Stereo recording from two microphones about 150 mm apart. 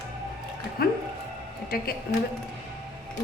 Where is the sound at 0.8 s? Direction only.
90° left.